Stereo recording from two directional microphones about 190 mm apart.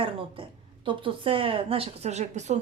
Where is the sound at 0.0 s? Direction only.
30° right (ahead or behind).